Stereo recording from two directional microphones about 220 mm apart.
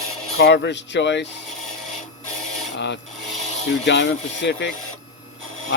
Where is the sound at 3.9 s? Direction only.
50° left (ahead or behind).